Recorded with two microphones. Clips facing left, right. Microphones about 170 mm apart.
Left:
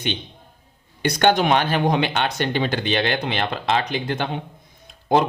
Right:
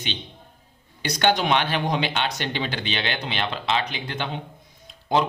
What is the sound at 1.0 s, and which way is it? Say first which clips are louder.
Speech: left 4 dB; 50° left (ahead or behind).